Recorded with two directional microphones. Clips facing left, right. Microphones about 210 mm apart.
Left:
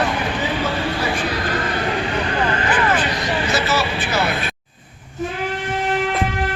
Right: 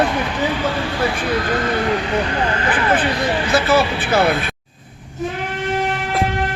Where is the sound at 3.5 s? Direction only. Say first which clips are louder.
Right 8 dB; 55° right (ahead or behind).